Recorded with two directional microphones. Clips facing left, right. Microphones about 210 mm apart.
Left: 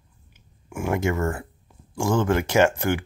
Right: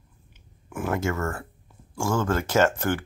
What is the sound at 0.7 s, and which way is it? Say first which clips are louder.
Speech: left 3 dB; 15° left (ahead or behind).